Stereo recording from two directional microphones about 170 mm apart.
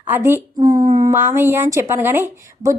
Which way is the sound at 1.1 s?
15° right (ahead or behind).